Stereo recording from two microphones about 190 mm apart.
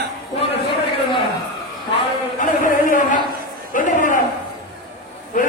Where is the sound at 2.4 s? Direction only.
45° left (ahead or behind).